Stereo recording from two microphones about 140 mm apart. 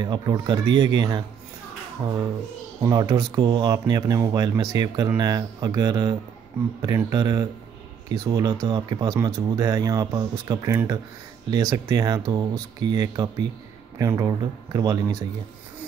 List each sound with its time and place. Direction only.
0.0 s speech: 30° right (ahead or behind)
2.8 s speech: 25° right (ahead or behind)